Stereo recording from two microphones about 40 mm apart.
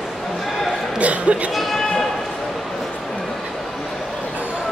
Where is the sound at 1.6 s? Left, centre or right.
Centre.